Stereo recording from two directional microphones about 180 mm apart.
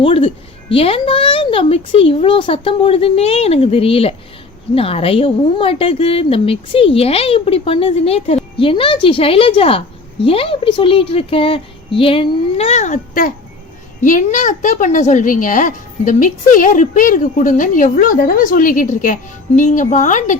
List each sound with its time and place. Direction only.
0.0 s a woman's voice: 30° left (ahead or behind)